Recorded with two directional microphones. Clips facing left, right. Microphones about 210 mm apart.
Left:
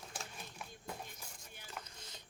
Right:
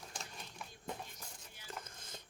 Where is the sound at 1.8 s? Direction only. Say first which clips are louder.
Right 2 dB; 50° right (ahead or behind).